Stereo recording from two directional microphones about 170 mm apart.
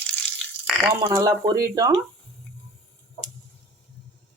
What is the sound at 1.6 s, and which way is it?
Speech, 20° right (ahead or behind).